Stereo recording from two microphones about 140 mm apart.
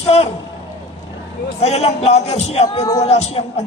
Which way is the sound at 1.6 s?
50° left (ahead or behind).